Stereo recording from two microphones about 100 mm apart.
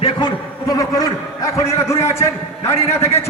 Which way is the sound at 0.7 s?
40° left (ahead or behind).